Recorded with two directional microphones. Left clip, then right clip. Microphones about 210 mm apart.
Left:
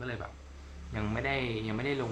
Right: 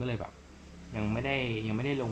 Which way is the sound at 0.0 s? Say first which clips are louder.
Right 2 dB; 15° right (ahead or behind).